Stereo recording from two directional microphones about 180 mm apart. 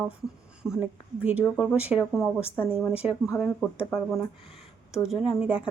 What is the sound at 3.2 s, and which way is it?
Speech, 15° left (ahead or behind).